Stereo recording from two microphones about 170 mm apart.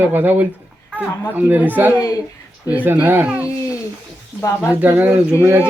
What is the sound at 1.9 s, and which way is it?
Speech, 20° left (ahead or behind).